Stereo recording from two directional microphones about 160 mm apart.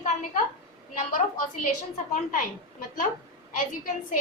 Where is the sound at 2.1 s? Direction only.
50° left (ahead or behind).